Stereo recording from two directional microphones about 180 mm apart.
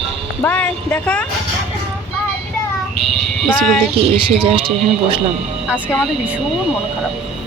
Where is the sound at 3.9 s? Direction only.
30° right (ahead or behind).